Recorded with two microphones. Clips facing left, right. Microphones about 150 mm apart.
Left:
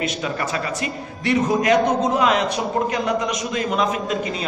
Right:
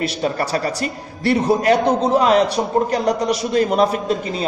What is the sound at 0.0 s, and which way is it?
A man's voice, 35° right (ahead or behind).